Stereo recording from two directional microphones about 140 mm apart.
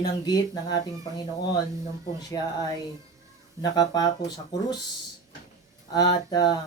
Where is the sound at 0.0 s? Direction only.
30° left (ahead or behind).